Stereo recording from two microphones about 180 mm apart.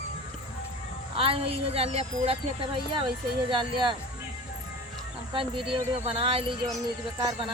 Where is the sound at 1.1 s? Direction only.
30° right (ahead or behind).